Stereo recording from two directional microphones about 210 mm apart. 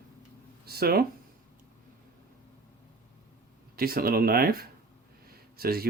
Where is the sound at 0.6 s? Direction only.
45° right (ahead or behind).